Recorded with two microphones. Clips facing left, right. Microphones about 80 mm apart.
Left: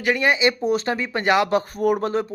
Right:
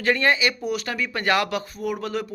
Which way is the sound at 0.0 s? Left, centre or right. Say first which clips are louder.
Left 2 dB; centre.